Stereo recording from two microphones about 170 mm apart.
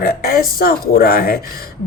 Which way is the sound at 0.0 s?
60° left (ahead or behind).